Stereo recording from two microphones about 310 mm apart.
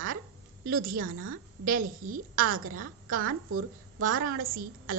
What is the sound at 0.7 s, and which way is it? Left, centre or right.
A woman's voice, right.